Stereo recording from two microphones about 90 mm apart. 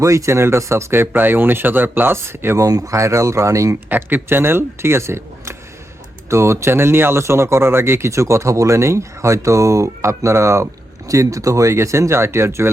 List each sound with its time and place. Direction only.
0.0 s speech: 35° right (ahead or behind)
2.6 s speech: 40° right (ahead or behind)
3.8 s speech: 20° right (ahead or behind)